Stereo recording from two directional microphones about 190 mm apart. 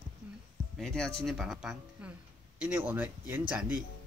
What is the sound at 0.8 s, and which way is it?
Speech, 5° left (ahead or behind).